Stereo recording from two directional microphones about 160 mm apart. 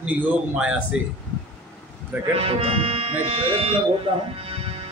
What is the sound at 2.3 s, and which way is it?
Music, 40° right (ahead or behind).